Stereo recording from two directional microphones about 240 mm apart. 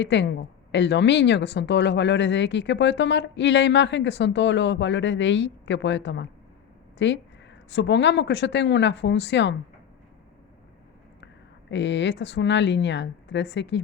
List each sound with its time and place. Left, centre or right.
0.0 s speech: left
11.7 s speech: left